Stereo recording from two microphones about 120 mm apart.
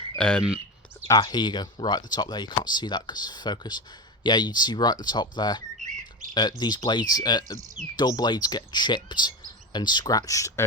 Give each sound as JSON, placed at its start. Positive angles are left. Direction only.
{"t": 0.2, "sound": "speech", "side_deg": 10}
{"t": 1.0, "sound": "speech", "side_deg": 30}